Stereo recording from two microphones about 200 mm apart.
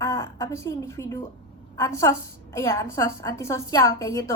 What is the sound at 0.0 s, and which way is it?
A woman's voice, 15° left (ahead or behind).